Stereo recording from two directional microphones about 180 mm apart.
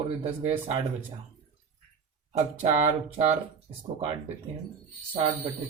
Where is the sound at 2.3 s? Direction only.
40° right (ahead or behind).